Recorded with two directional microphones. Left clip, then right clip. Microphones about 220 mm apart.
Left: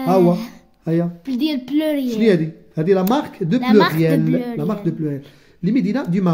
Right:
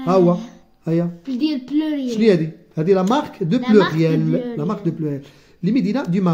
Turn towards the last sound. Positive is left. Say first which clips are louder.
# even
turn(degrees=0)  # may be behind; listen again after turning